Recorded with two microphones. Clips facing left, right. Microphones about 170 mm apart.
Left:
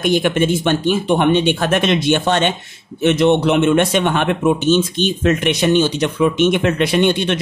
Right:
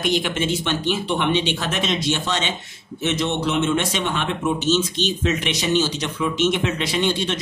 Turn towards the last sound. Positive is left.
turn(degrees=60)  # may be behind; listen again after turning